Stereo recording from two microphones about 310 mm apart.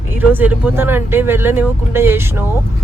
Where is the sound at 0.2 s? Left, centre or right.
Centre.